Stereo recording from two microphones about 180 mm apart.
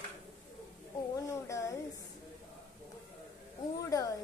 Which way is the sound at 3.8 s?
20° left (ahead or behind).